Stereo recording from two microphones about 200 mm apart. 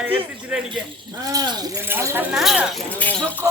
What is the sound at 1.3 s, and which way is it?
Speech, 20° right (ahead or behind).